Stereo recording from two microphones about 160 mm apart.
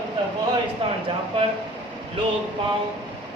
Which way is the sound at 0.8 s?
35° right (ahead or behind).